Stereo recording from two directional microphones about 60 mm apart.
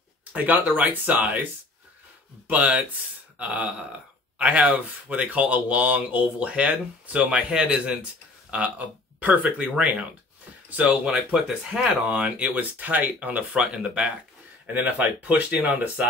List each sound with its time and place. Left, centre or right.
0.2 s speech: right
3.3 s a sound: right
4.4 s speech: right